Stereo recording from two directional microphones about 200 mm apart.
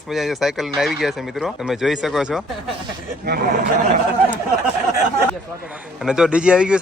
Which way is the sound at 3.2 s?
55° right (ahead or behind).